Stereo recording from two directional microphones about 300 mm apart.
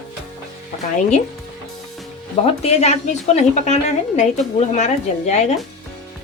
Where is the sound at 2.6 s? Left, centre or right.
Left.